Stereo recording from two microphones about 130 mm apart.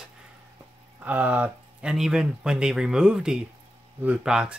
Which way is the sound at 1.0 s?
10° right (ahead or behind).